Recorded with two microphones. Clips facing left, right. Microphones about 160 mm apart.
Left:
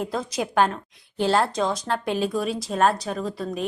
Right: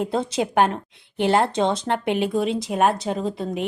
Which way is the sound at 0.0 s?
25° right (ahead or behind).